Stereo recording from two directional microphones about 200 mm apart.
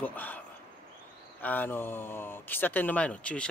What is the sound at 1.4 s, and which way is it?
Speech, 10° left (ahead or behind).